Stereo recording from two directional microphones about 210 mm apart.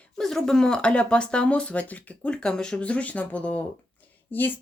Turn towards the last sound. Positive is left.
turn(degrees=10)  # may be behind; listen again after turning